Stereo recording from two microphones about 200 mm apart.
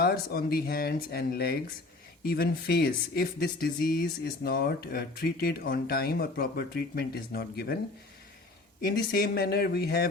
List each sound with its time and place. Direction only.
0.0 s speech: 50° left (ahead or behind)
8.8 s speech: 50° left (ahead or behind)